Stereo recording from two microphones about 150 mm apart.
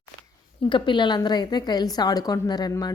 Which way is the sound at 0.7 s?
30° left (ahead or behind).